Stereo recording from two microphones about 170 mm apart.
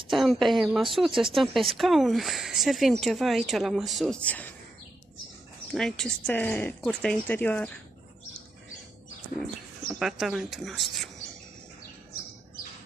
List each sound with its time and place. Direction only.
0.1 s speech: centre (ahead or behind)
5.7 s speech: 5° left (ahead or behind)
9.9 s speech: centre (ahead or behind)